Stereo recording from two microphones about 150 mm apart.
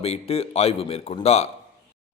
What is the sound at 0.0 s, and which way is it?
A man's voice, 40° left (ahead or behind).